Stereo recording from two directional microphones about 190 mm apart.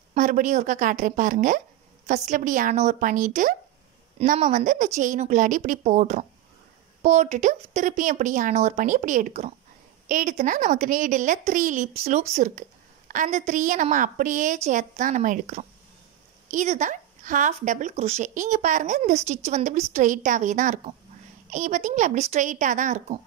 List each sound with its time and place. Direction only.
0.1 s a woman's voice: 45° right (ahead or behind)